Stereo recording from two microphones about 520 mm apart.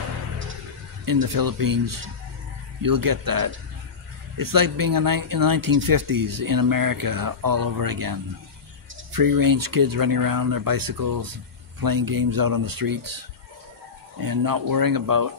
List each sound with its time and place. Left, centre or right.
1.0 s speech: right
14.2 s speech: right